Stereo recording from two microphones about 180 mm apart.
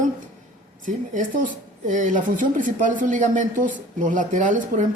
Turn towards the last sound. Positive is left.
turn(degrees=-45)  # may be behind; listen again after turning